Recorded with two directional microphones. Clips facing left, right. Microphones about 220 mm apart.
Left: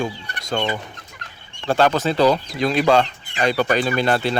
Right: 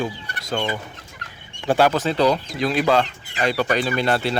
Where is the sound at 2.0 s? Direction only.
45° left (ahead or behind).